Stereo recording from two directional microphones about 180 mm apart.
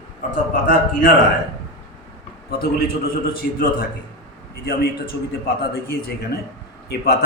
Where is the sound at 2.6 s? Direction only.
55° left (ahead or behind).